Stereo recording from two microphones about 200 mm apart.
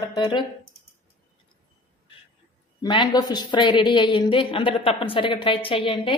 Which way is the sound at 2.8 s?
20° left (ahead or behind).